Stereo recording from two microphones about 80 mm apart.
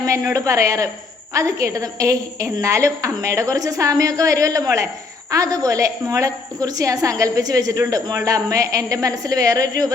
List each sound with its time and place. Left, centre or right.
0.0 s a woman's voice: right